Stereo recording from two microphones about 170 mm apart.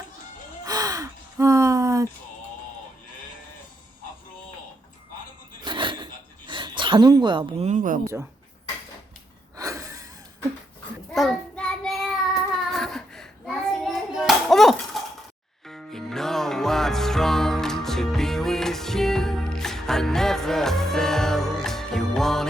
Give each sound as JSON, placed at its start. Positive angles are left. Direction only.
{"t": 0.6, "sound": "gasp", "side_deg": -20}
{"t": 5.6, "sound": "a sound", "side_deg": -30}
{"t": 6.5, "sound": "speech", "side_deg": -25}
{"t": 7.7, "sound": "speech", "side_deg": -50}
{"t": 9.6, "sound": "gasp", "side_deg": -20}
{"t": 11.1, "sound": "child singing", "side_deg": 0}
{"t": 15.6, "sound": "music", "side_deg": 0}